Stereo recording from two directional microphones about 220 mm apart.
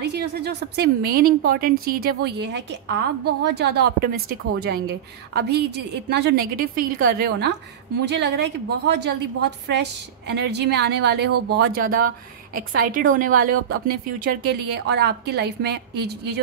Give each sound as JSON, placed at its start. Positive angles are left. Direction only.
{"t": 0.0, "sound": "a woman's voice", "side_deg": -50}